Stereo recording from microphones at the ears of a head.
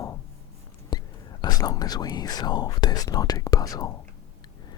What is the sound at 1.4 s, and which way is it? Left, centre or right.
Speech, left.